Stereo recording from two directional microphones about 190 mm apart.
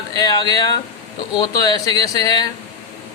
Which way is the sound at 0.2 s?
20° left (ahead or behind).